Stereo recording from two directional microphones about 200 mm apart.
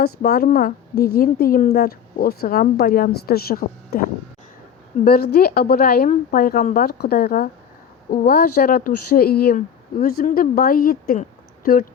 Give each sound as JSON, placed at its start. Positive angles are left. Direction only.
{"t": 0.0, "sound": "a woman's voice", "side_deg": 50}
{"t": 5.0, "sound": "a woman's voice", "side_deg": 50}